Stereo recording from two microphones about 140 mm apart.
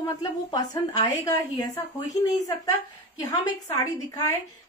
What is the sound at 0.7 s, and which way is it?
Speech, 25° left (ahead or behind).